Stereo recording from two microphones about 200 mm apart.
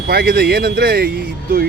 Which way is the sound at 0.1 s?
50° right (ahead or behind).